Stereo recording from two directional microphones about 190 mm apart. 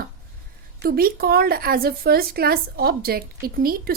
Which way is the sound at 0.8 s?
50° right (ahead or behind).